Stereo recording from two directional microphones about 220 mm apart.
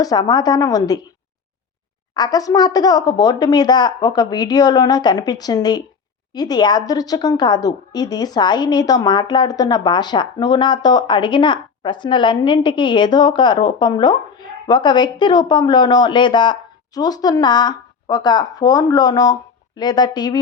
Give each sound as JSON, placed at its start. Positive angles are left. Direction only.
{"t": 0.0, "sound": "speech", "side_deg": 15}
{"t": 2.1, "sound": "a woman's voice", "side_deg": 15}